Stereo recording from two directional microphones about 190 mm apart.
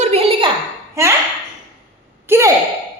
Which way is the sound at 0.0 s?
30° right (ahead or behind).